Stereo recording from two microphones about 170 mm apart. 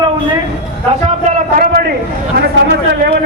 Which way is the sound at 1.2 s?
50° right (ahead or behind).